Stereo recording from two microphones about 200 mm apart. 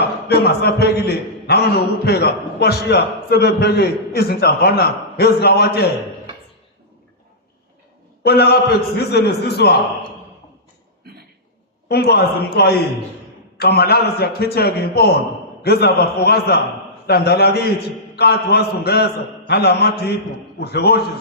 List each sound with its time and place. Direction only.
0.3 s a man's voice: 50° left (ahead or behind)
8.2 s a man's voice: 50° left (ahead or behind)
11.9 s a man's voice: 55° left (ahead or behind)